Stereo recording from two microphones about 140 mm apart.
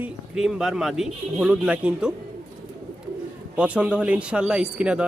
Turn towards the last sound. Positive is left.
turn(degrees=-5)  # may be behind; listen again after turning